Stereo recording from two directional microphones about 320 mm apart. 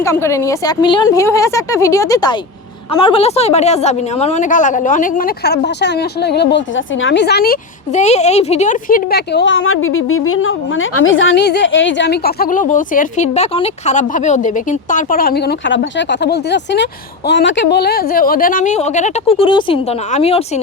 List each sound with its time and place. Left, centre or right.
0.0 s a woman's voice: centre